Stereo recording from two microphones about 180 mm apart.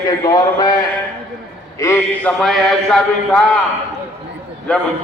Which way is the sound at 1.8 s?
15° left (ahead or behind).